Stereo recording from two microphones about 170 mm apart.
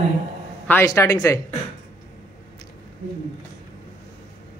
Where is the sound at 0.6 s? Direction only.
15° left (ahead or behind).